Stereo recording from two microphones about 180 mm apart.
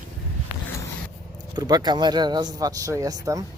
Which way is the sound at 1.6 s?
20° right (ahead or behind).